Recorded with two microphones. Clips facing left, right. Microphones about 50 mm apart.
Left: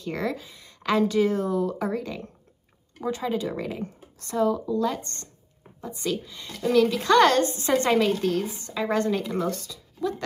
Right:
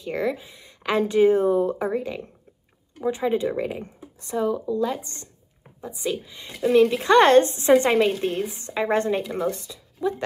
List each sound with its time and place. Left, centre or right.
0.0 s a woman's voice: centre